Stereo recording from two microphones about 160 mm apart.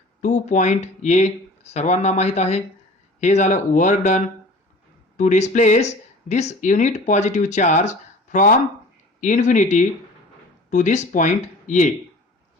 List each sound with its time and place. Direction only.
0.2 s speech: 50° left (ahead or behind)